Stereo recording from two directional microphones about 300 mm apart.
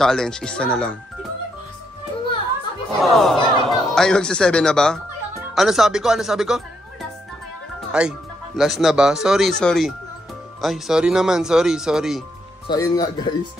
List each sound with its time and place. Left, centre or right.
0.0 s speech: centre
3.0 s speech: centre
7.9 s speech: centre
12.6 s speech: centre